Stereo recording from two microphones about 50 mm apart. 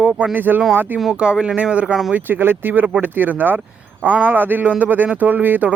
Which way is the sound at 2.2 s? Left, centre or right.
Right.